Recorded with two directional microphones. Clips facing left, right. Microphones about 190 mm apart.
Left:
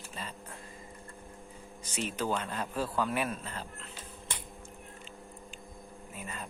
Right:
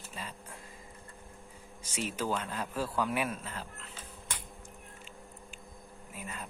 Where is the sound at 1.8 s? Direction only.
10° right (ahead or behind).